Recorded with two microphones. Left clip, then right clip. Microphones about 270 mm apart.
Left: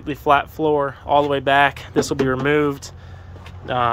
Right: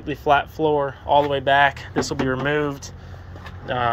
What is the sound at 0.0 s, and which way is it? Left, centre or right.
Speech, centre.